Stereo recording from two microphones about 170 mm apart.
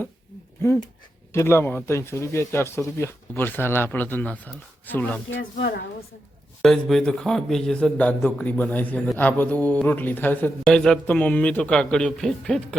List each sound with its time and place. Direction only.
1.3 s speech: 15° left (ahead or behind)
5.3 s speech: 80° left
6.6 s a man's voice: centre (ahead or behind)